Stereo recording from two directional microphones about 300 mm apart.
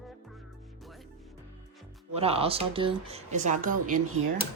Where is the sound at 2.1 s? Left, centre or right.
Centre.